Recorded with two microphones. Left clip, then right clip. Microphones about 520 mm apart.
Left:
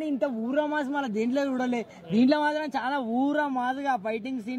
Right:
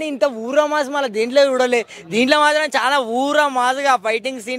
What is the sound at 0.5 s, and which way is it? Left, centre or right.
Speech, right.